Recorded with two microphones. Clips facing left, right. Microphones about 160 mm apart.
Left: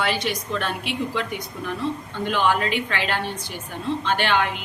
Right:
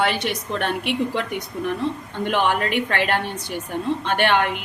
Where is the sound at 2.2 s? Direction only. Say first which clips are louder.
Right 1 dB; 55° right (ahead or behind).